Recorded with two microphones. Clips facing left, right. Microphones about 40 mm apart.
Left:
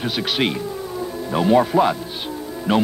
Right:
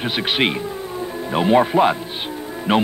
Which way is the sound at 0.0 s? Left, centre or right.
Right.